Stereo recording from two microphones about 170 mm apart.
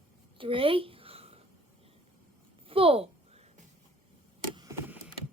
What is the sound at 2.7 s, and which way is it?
Speech, 35° right (ahead or behind).